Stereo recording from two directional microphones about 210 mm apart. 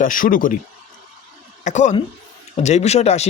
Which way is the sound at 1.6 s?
35° left (ahead or behind).